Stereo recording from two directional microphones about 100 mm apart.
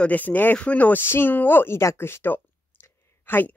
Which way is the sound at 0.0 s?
15° left (ahead or behind).